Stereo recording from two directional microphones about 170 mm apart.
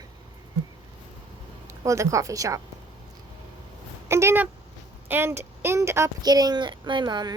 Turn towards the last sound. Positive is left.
turn(degrees=-25)  # may be behind; listen again after turning